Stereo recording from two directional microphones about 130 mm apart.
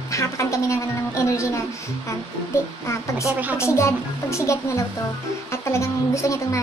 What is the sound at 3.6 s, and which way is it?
Speech, 20° left (ahead or behind).